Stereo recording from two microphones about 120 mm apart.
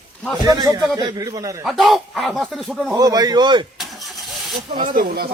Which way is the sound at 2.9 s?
30° right (ahead or behind).